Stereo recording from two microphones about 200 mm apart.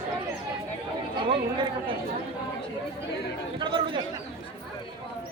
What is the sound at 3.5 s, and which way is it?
Speech, 25° right (ahead or behind).